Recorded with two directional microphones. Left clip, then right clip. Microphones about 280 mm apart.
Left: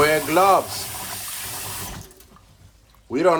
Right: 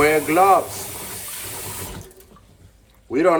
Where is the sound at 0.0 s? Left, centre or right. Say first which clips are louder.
Right 1 dB; centre.